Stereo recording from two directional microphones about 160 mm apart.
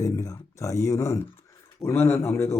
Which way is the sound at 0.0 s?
20° left (ahead or behind).